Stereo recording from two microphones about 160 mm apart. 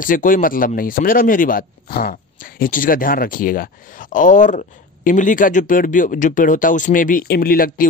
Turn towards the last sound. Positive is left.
turn(degrees=65)  # may be behind; listen again after turning